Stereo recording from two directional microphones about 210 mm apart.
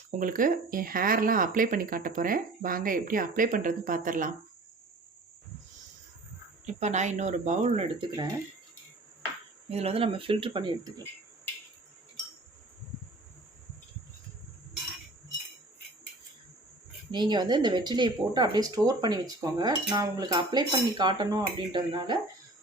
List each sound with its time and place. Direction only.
0.2 s speech: 40° right (ahead or behind)
6.7 s speech: 35° right (ahead or behind)
9.6 s speech: 30° right (ahead or behind)
17.1 s speech: 20° right (ahead or behind)